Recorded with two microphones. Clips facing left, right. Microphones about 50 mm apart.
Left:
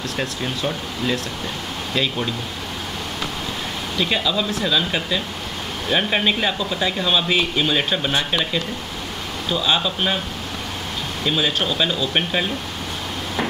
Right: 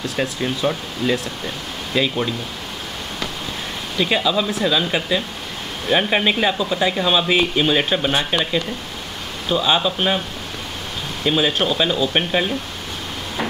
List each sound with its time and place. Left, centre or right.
0.4 s speech: centre
4.0 s speech: centre
11.2 s speech: centre